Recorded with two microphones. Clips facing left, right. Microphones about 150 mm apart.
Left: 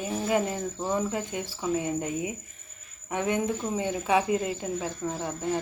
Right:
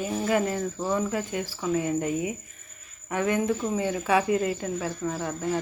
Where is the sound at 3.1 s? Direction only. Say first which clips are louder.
Right 2 dB; 20° left (ahead or behind).